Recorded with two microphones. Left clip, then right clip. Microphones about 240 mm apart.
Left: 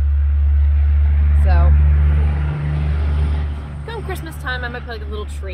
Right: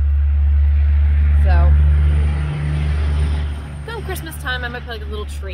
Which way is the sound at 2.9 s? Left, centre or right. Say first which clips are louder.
Right 1 dB; right.